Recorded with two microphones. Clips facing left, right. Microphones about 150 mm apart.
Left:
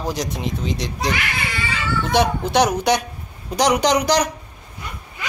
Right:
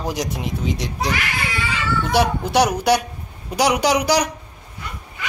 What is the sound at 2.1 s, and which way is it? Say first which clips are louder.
A man's voice: even; 5° right (ahead or behind).